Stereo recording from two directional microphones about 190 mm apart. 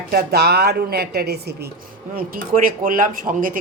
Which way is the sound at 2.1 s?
45° right (ahead or behind).